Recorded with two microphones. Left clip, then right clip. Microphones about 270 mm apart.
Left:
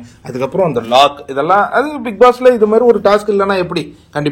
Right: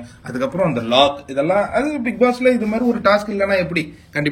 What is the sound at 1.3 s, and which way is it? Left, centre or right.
A man's voice, left.